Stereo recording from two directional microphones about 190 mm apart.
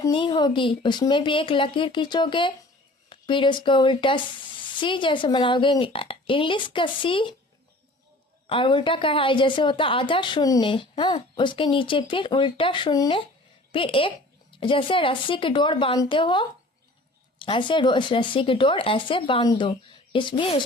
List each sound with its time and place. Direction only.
0.0 s a woman's voice: 25° left (ahead or behind)
8.4 s a woman's voice: 25° left (ahead or behind)